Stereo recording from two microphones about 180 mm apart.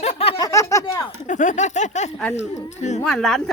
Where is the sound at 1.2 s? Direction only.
45° left (ahead or behind).